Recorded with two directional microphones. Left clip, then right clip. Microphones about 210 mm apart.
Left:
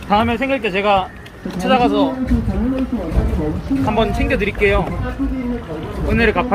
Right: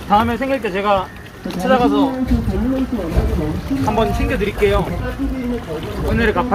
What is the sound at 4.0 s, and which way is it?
Speech, 20° left (ahead or behind).